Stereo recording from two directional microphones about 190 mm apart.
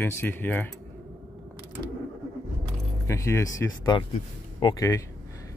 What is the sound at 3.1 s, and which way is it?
Speech, 15° left (ahead or behind).